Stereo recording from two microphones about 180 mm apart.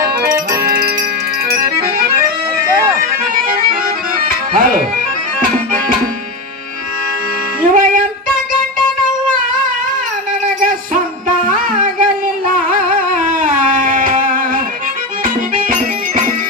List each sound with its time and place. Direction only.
1.5 s accordion: 55° right (ahead or behind)
4.5 s bagpipes: 50° right (ahead or behind)
7.7 s music: 45° right (ahead or behind)
11.4 s music: 45° right (ahead or behind)